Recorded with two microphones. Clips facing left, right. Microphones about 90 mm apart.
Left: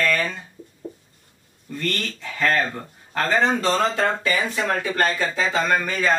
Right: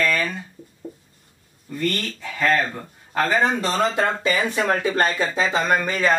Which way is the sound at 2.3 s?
10° right (ahead or behind).